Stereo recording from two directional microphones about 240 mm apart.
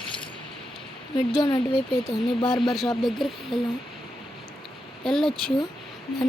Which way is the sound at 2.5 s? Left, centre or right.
Centre.